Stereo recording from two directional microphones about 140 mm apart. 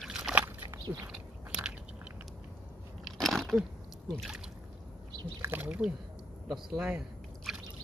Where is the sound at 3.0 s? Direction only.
Centre (ahead or behind).